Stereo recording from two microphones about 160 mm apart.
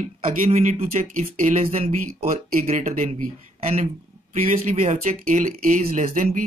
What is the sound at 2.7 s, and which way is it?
Speech, 55° right (ahead or behind).